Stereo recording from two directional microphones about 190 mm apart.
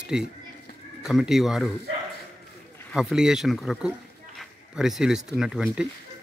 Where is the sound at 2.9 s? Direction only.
Centre (ahead or behind).